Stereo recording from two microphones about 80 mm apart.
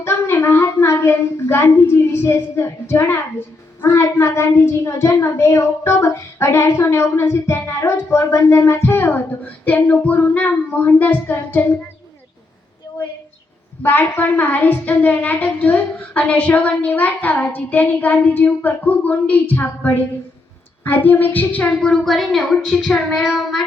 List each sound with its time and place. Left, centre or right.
0.0 s a child's voice: left
13.8 s a woman's voice: left
23.2 s child singing: centre